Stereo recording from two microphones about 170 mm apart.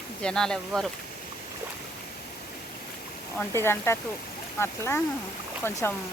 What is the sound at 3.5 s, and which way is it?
Speech, 15° left (ahead or behind).